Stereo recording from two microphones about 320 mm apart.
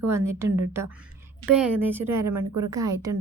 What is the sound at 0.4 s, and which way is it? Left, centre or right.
Speech, right.